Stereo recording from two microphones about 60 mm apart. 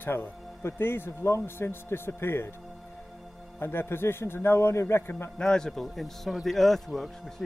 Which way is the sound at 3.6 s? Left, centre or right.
Left.